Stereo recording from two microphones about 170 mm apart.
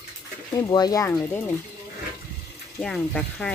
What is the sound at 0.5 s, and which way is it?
Speech, 20° left (ahead or behind).